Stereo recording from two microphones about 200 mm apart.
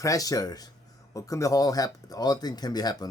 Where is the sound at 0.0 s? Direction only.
15° left (ahead or behind).